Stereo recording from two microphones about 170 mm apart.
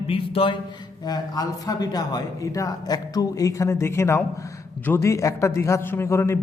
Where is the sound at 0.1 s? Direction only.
35° left (ahead or behind).